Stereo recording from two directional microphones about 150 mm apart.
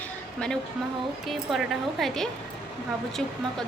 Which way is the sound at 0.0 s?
5° left (ahead or behind).